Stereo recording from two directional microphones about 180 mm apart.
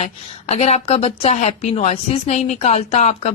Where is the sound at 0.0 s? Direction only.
35° left (ahead or behind).